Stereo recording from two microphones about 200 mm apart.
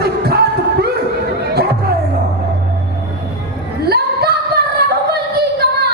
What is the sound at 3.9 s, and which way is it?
Singing, 55° right (ahead or behind).